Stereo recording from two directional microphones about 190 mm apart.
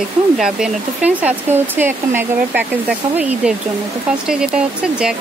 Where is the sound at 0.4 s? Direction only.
5° right (ahead or behind).